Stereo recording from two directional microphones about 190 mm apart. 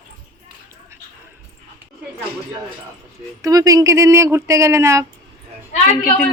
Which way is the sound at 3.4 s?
20° right (ahead or behind).